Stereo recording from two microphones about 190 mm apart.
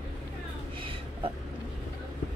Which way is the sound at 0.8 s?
25° right (ahead or behind).